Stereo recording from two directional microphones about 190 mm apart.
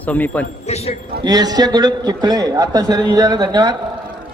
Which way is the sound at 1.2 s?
20° right (ahead or behind).